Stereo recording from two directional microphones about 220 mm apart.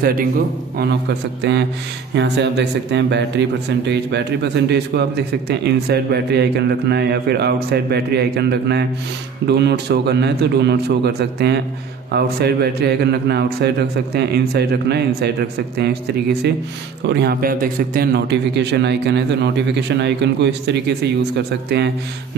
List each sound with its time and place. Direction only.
0.0 s a man's voice: 40° right (ahead or behind)
1.4 s a man's voice: 50° right (ahead or behind)
17.0 s a man's voice: 50° right (ahead or behind)